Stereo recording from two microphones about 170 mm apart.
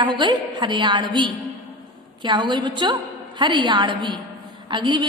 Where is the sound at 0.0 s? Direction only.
25° right (ahead or behind).